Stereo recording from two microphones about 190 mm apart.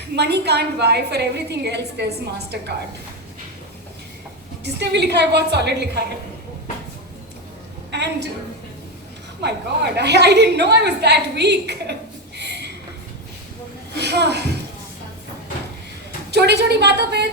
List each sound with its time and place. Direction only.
0.2 s a woman's voice: 60° right (ahead or behind)
4.6 s a woman's voice: 60° right (ahead or behind)
7.9 s a sound: 65° right (ahead or behind)
9.4 s a woman's voice: 60° right (ahead or behind)
12.4 s a sound: 60° right (ahead or behind)
14.0 s a woman's voice: 60° right (ahead or behind)
16.3 s a woman's voice: 60° right (ahead or behind)